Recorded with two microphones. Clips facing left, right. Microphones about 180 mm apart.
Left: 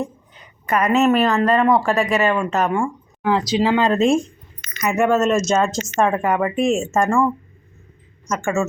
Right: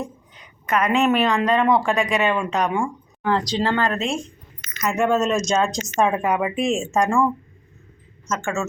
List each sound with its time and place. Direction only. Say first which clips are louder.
0.7 s speech: left 3 dB; 5° left (ahead or behind)
3.9 s speech: left 9 dB; 50° left (ahead or behind)
4.8 s speech: left 3 dB; 5° left (ahead or behind)
8.3 s speech: left 4 dB; 10° left (ahead or behind)